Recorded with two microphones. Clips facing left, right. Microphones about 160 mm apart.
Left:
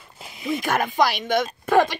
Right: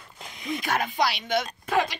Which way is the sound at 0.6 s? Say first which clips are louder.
Left 5 dB; 50° left (ahead or behind).